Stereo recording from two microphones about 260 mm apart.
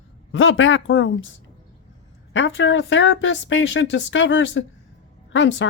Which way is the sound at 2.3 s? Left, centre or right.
Left.